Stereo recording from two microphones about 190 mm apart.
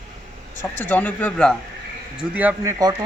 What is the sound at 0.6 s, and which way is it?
Speech, 10° left (ahead or behind).